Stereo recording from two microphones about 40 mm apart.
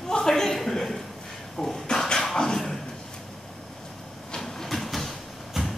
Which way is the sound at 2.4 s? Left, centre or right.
Centre.